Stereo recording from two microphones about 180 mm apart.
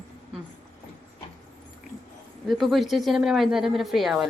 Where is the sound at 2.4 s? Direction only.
Centre (ahead or behind).